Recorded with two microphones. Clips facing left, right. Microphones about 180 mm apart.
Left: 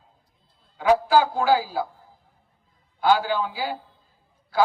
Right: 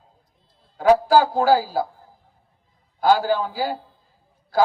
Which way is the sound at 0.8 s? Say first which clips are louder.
Right 3 dB; 40° right (ahead or behind).